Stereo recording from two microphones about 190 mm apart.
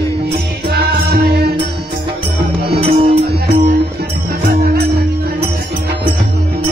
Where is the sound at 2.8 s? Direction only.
30° right (ahead or behind).